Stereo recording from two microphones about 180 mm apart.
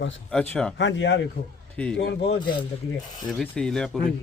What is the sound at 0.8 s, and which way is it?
Speech, 80° left.